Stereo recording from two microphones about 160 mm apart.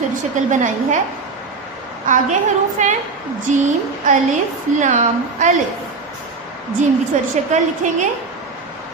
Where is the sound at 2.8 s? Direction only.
50° right (ahead or behind).